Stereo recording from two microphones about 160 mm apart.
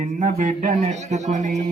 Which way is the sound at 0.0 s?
50° right (ahead or behind).